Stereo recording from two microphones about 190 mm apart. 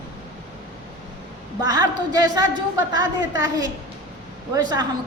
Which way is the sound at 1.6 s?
20° right (ahead or behind).